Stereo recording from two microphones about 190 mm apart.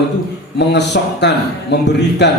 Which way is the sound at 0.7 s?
65° left (ahead or behind).